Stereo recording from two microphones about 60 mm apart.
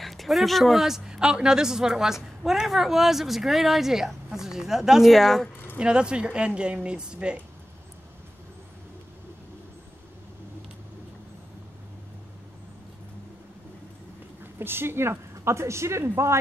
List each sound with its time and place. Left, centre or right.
0.0 s speech: centre
5.1 s speech: centre
5.8 s speech: centre
14.4 s a woman's voice: right